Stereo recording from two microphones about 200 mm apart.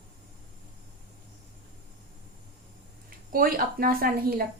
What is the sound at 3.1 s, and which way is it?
Speech, 45° right (ahead or behind).